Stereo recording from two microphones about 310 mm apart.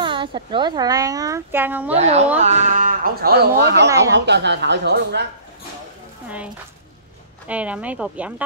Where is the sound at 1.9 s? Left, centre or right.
Right.